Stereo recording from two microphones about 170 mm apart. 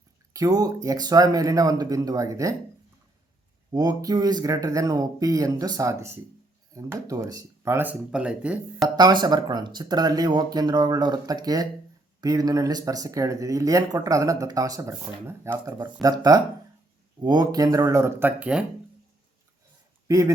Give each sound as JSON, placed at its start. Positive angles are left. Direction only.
{"t": 0.3, "sound": "speech", "side_deg": -20}
{"t": 3.7, "sound": "speech", "side_deg": -20}
{"t": 9.0, "sound": "speech", "side_deg": -25}
{"t": 20.1, "sound": "speech", "side_deg": -20}